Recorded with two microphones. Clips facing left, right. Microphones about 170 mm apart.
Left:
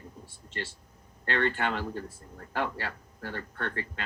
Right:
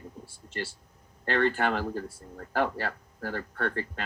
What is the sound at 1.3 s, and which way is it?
Speech, 40° right (ahead or behind).